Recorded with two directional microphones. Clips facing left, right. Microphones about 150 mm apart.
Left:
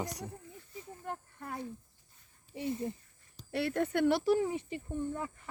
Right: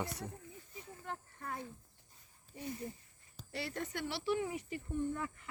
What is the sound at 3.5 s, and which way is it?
Speech, 55° left (ahead or behind).